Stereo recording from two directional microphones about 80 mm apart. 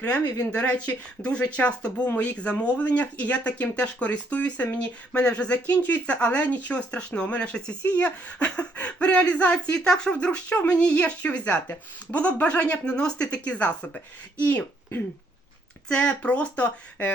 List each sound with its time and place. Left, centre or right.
0.6 s speech: centre
15.9 s speech: centre